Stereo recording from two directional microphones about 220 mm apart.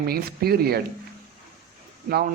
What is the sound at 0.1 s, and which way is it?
Speech, 45° right (ahead or behind).